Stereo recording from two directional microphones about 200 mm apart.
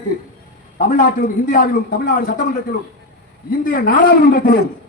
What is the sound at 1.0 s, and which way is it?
A woman's voice, 40° left (ahead or behind).